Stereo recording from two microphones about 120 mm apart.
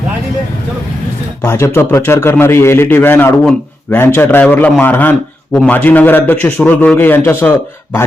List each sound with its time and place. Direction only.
1.4 s a man's voice: 25° left (ahead or behind)